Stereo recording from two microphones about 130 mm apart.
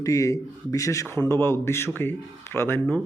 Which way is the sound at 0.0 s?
25° left (ahead or behind).